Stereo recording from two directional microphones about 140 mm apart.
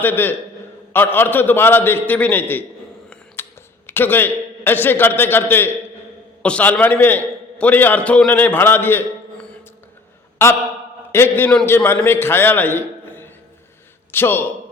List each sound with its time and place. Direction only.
0.0 s a man's voice: 15° left (ahead or behind)
3.8 s a man's voice: 15° left (ahead or behind)